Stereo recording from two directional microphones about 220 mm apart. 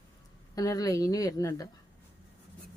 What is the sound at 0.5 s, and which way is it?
A woman's voice, 15° left (ahead or behind).